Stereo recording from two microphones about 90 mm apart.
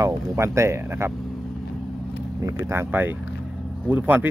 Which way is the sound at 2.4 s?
30° right (ahead or behind).